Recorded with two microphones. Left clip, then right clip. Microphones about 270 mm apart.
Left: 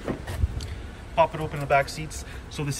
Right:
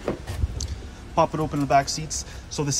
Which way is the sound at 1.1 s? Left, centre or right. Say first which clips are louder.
Right 1 dB; centre.